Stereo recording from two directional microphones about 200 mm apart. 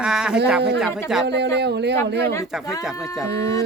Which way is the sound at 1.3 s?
55° right (ahead or behind).